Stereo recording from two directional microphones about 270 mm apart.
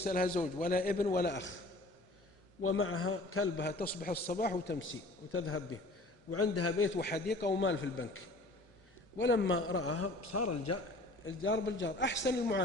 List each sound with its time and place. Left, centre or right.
0.0 s a man's voice: left
2.6 s a man's voice: left
9.1 s a man's voice: left
11.3 s a man's voice: left